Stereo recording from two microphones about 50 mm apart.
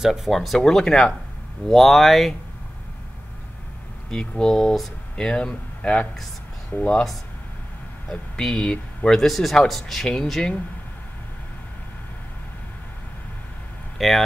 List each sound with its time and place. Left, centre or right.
0.0 s speech: centre
4.1 s speech: centre
8.1 s speech: centre
13.9 s speech: centre